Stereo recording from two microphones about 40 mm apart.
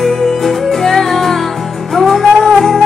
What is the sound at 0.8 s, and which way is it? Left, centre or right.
Music, centre.